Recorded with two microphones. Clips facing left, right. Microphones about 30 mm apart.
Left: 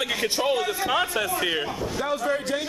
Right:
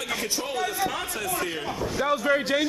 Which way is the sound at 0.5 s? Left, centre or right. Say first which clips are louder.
Left 2 dB; left.